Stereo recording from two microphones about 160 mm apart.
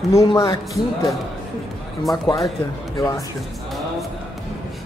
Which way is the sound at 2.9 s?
20° left (ahead or behind).